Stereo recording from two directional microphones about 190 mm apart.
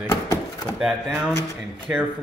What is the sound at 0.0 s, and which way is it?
Chopping, 20° left (ahead or behind).